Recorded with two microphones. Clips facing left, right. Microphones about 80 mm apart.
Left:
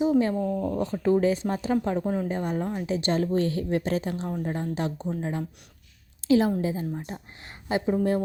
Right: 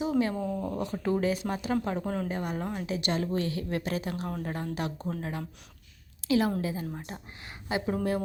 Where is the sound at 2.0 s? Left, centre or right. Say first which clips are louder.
Left 4 dB; centre.